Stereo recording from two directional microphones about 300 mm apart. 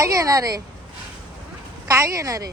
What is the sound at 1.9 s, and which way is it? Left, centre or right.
Speech, centre.